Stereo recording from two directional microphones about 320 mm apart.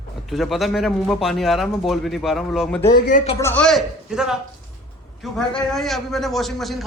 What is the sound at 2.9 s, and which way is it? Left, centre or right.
Speech, left.